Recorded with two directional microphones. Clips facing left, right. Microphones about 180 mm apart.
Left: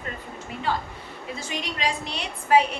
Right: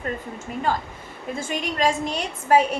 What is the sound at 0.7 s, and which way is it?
A woman's voice, 45° right (ahead or behind).